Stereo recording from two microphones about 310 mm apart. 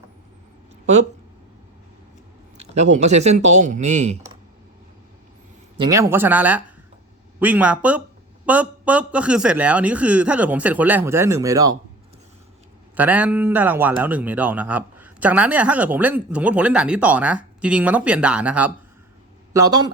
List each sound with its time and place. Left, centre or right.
2.8 s speech: right
5.8 s speech: centre
13.0 s speech: centre